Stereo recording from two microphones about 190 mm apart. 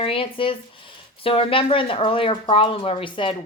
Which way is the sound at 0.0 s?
30° left (ahead or behind).